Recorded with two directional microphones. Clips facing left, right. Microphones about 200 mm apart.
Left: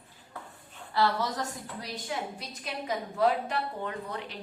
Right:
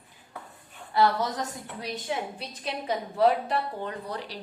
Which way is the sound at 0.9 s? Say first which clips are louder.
Right 3 dB; 20° right (ahead or behind).